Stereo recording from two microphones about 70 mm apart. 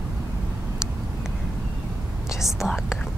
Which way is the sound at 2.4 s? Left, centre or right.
Centre.